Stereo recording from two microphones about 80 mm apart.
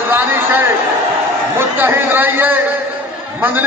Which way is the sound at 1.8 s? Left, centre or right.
Right.